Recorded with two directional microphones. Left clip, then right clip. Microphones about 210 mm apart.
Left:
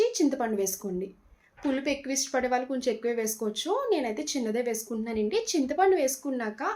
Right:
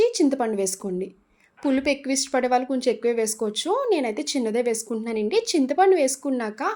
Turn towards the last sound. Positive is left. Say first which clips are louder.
# right 5 dB
turn(degrees=-45)  # may be behind; listen again after turning